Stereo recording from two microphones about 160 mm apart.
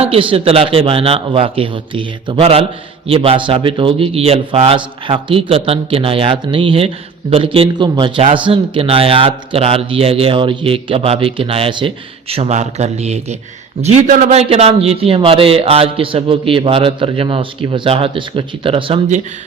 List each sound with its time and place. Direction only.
0.0 s a man's voice: 35° right (ahead or behind)